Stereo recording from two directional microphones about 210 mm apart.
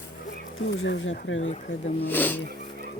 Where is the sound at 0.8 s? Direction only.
65° left (ahead or behind).